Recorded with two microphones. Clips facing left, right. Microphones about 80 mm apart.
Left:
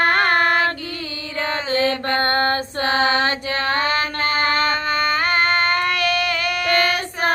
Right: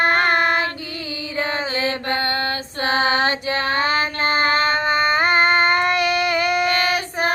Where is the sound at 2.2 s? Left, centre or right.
Left.